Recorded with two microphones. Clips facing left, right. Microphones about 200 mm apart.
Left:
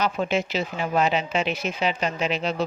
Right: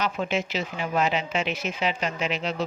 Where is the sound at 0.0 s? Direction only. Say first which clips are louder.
Left 3 dB; 35° left (ahead or behind).